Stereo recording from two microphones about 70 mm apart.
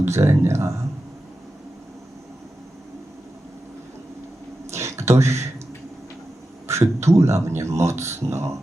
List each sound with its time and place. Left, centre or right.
0.0 s speech: right
4.7 s a sound: right
6.7 s speech: right